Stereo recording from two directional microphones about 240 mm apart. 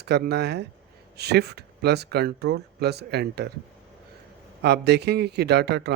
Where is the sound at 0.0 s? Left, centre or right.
Right.